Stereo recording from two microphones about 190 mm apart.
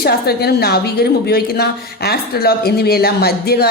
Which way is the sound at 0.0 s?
55° left (ahead or behind).